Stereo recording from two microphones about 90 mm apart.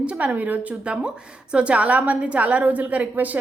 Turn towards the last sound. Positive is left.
turn(degrees=-20)  # may be behind; listen again after turning